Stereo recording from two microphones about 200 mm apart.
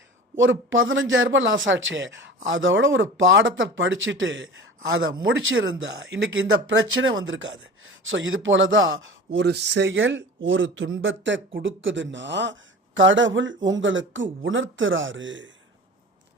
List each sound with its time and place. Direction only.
0.3 s speech: 70° right (ahead or behind)